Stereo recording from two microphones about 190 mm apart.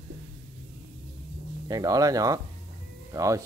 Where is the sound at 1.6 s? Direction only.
20° right (ahead or behind).